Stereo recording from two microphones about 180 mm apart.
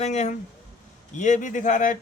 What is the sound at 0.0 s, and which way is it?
Speech, 40° left (ahead or behind).